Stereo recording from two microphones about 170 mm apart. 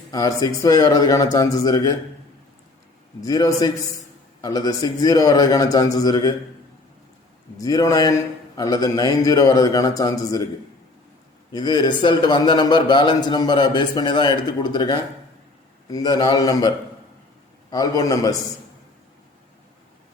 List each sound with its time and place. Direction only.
0.1 s a man's voice: 20° left (ahead or behind)
3.2 s a man's voice: 20° left (ahead or behind)
7.6 s a man's voice: 20° left (ahead or behind)
11.5 s a man's voice: 25° left (ahead or behind)